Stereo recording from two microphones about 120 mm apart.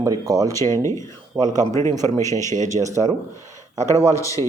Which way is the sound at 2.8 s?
30° right (ahead or behind).